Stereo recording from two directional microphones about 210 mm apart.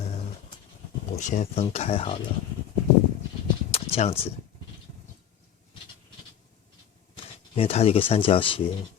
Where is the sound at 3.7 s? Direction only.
30° left (ahead or behind).